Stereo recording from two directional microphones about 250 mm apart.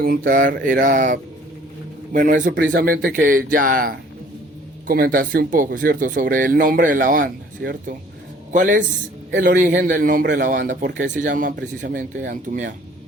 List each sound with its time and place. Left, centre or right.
0.0 s a man's voice: right